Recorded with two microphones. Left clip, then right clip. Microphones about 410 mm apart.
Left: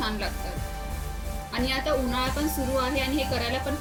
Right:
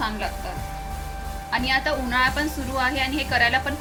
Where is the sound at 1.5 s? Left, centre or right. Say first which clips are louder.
Right 4 dB; centre.